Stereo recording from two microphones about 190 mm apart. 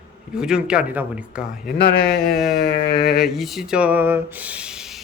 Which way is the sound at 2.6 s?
55° left (ahead or behind).